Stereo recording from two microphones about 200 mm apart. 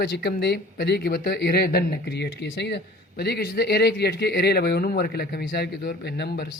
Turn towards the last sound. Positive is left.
turn(degrees=55)  # may be behind; listen again after turning